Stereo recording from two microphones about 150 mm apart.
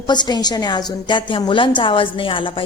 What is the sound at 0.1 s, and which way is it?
A woman's voice, 30° left (ahead or behind).